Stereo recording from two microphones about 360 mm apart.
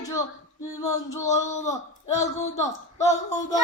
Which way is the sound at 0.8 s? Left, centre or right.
Centre.